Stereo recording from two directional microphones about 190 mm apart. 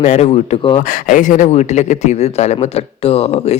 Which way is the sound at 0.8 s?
45° left (ahead or behind).